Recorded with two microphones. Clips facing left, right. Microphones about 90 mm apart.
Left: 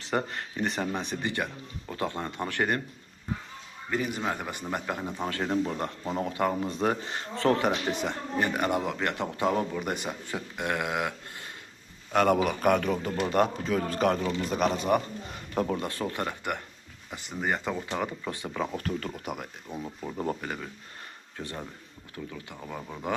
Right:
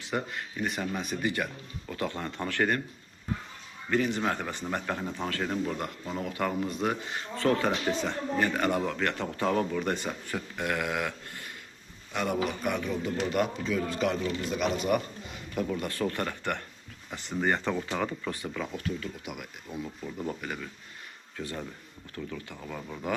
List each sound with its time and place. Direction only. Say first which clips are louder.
0.3 s speech: left 2 dB; 35° left (ahead or behind); by 2.8 s 20° left (ahead or behind)
3.9 s speech: right 2 dB; 10° left (ahead or behind); by 7.6 s 35° left (ahead or behind)
7.6 s speech: left 1 dB; 20° left (ahead or behind)
12.1 s a man's voice: left 6 dB; 65° left (ahead or behind)
13.1 s speech: left 2 dB; 40° left (ahead or behind)
15.8 s speech: right 1 dB; 25° left (ahead or behind)
18.3 s speech: even; 25° left (ahead or behind)
18.6 s speech: left 5 dB; 40° left (ahead or behind); by 23.1 s 20° left (ahead or behind)